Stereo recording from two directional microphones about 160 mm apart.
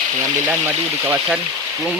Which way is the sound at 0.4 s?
15° right (ahead or behind).